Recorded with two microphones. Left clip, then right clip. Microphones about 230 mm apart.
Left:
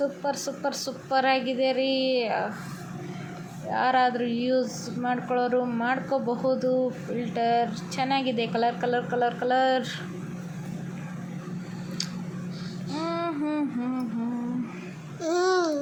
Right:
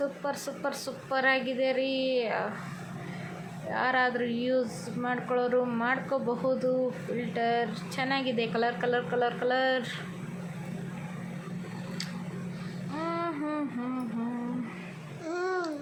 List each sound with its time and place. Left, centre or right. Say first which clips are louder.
0.0 s a woman's voice: left 4 dB; centre
3.7 s a woman's voice: left 4 dB; centre
7.3 s a woman's voice: left 5 dB; centre
13.0 s a sound: left 3 dB; centre
15.2 s babbling: left 8 dB; left